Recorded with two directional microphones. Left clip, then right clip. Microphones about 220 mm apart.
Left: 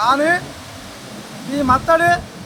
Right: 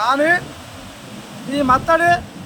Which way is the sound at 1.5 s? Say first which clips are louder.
Even; 5° right (ahead or behind).